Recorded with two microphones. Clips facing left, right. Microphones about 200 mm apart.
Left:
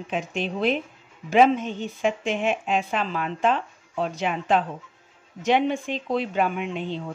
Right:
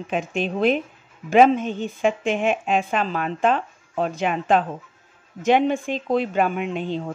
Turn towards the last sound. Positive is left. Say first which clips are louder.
# right 3 dB
turn(degrees=-45)  # may be behind; listen again after turning